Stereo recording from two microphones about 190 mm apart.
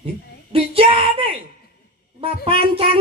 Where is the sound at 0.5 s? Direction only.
30° right (ahead or behind).